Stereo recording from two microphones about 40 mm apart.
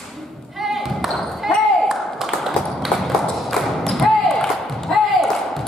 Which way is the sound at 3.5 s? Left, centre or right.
Centre.